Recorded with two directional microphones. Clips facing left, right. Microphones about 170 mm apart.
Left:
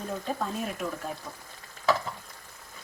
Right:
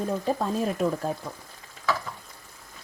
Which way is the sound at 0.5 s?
35° right (ahead or behind).